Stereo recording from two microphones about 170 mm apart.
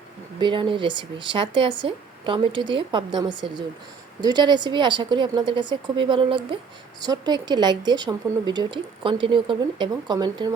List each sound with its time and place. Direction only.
0.3 s a woman's voice: 30° right (ahead or behind)